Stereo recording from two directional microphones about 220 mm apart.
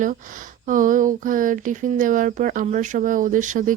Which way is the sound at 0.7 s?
35° right (ahead or behind).